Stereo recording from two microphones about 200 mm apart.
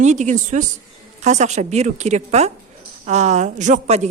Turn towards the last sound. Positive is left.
turn(degrees=-35)  # may be behind; listen again after turning